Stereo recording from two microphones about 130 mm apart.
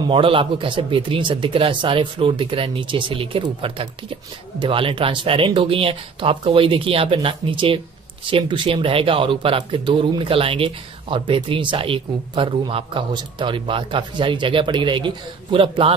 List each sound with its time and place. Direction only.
0.1 s speech: 40° right (ahead or behind)